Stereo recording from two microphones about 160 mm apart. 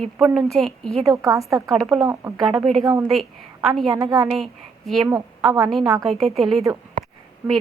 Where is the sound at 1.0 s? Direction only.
20° right (ahead or behind).